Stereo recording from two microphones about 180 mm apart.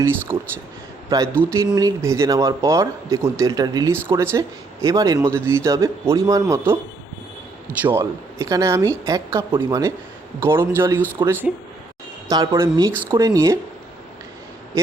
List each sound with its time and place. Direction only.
0.3 s speech: 15° right (ahead or behind)
7.8 s speech: 10° right (ahead or behind)